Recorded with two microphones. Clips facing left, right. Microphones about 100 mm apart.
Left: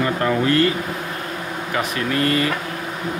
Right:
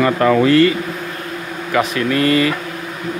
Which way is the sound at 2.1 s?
90° right.